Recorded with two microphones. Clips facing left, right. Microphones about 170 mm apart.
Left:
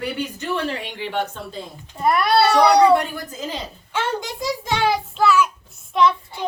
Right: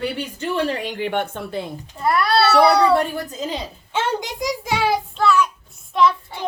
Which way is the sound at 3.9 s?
20° right (ahead or behind).